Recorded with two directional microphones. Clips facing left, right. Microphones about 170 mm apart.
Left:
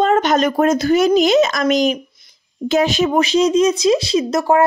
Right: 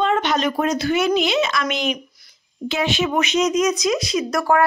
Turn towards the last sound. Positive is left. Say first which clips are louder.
# left 4 dB
turn(degrees=25)  # may be behind; listen again after turning